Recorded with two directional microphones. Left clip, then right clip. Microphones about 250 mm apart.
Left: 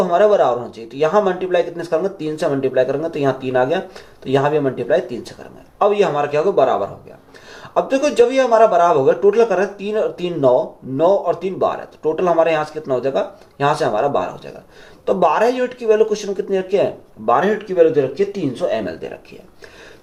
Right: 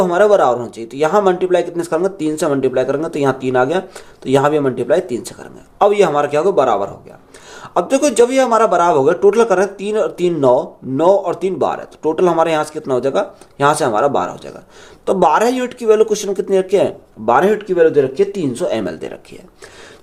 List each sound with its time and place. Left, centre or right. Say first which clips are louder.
0.0 s speech: right 2 dB; right